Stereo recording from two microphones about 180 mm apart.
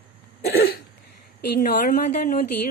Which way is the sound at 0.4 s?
60° left (ahead or behind).